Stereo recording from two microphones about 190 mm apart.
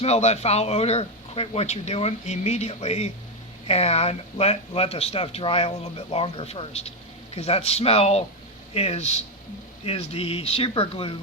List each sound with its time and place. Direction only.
0.0 s speech: 35° left (ahead or behind)